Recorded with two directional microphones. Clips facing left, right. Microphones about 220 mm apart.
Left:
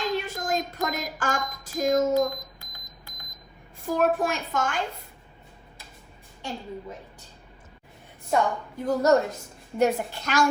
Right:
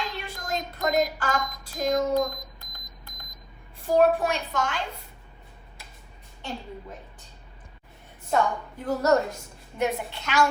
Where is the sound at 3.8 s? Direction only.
50° left (ahead or behind).